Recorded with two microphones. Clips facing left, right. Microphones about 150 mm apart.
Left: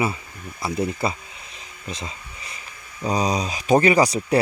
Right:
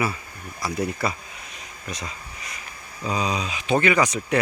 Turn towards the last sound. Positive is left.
turn(degrees=35)  # may be behind; listen again after turning